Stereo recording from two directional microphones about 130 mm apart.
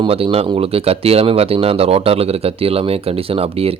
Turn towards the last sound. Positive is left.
turn(degrees=-50)  # may be behind; listen again after turning